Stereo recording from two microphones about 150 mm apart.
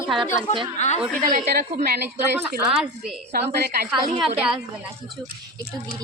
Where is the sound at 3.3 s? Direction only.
90° right.